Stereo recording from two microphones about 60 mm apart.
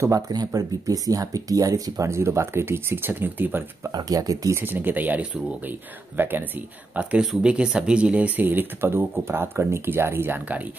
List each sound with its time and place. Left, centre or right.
0.0 s speech: right
4.1 s speech: right
4.6 s speech: right
7.4 s speech: centre
8.5 s speech: right